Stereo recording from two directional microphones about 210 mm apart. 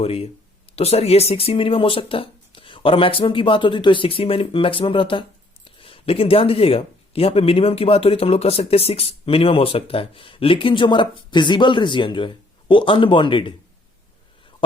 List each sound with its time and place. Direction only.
0.0 s speech: 30° left (ahead or behind)